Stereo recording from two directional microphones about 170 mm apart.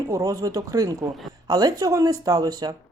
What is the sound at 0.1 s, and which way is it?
Speech, 20° right (ahead or behind).